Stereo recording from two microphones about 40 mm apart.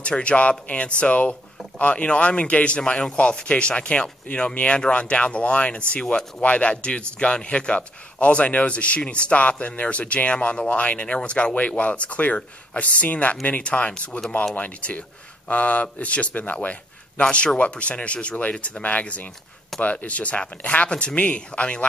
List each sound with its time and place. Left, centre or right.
0.0 s speech: left
17.2 s speech: left